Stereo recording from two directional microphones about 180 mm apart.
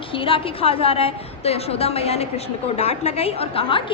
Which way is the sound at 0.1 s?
30° left (ahead or behind).